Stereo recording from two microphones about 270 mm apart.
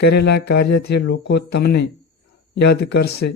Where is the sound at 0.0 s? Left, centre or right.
Left.